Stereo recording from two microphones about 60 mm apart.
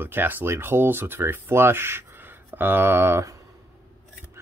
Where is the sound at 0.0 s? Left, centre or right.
Right.